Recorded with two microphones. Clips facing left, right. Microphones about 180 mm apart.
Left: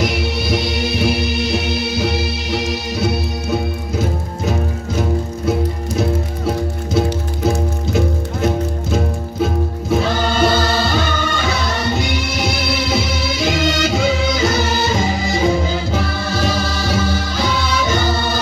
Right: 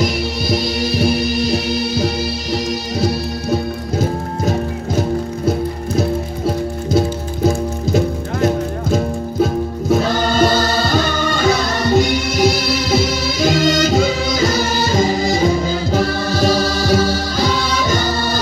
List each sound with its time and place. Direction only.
0.0 s music: 40° right (ahead or behind)
8.9 s music: 40° right (ahead or behind)